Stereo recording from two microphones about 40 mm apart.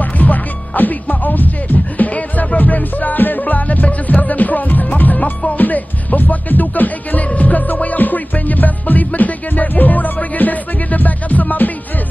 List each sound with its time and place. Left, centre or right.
0.0 s music: left